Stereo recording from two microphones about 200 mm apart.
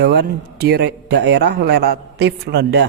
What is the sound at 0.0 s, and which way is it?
A man's voice, 55° right (ahead or behind).